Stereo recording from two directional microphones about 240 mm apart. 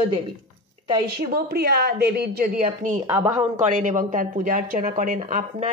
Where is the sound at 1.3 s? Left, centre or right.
Right.